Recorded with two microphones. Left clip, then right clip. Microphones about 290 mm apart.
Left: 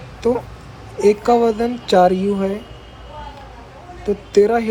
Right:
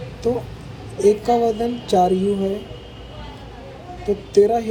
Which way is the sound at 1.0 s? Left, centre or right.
Centre.